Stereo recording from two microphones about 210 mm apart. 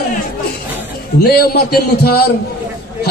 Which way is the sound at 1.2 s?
50° left (ahead or behind).